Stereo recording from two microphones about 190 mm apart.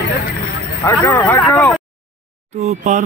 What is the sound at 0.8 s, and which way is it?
Speech, 15° left (ahead or behind).